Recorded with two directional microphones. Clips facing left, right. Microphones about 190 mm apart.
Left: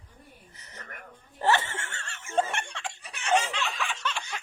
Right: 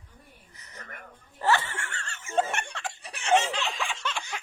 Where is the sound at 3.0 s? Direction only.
30° right (ahead or behind).